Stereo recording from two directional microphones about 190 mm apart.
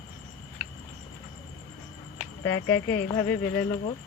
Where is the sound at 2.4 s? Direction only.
15° left (ahead or behind).